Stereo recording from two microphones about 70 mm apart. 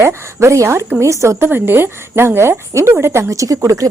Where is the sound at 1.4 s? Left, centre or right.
Right.